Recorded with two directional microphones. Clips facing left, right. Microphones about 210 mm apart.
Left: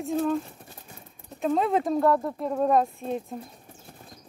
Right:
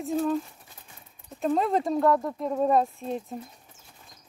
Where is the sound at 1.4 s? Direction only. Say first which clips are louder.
Left 1 dB; centre (ahead or behind).